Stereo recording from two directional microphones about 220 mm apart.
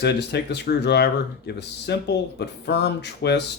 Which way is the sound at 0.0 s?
50° left (ahead or behind).